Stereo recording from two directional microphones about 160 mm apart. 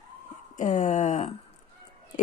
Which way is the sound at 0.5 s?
50° left (ahead or behind).